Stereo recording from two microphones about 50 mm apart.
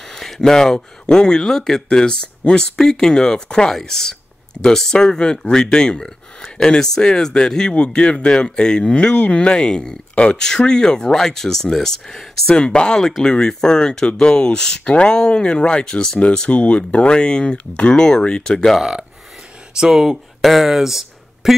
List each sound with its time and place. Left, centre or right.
0.1 s a sound: centre
1.0 s speech: centre
16.4 s speech: left
18.8 s speech: centre